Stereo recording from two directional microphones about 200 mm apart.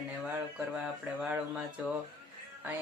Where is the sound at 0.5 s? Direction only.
5° right (ahead or behind).